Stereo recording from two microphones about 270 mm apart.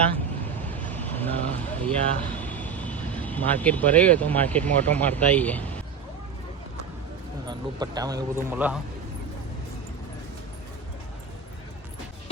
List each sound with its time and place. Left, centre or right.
0.7 s speech: centre
7.4 s a man's voice: centre